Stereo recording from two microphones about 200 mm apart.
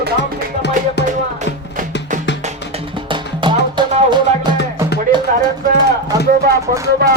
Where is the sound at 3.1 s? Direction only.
25° right (ahead or behind).